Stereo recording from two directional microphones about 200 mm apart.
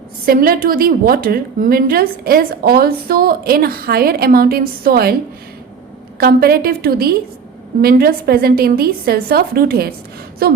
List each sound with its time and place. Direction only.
0.3 s a woman's voice: 45° right (ahead or behind)
6.1 s a woman's voice: 50° right (ahead or behind)